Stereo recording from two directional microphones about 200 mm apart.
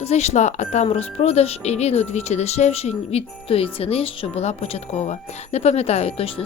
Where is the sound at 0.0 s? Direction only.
35° left (ahead or behind).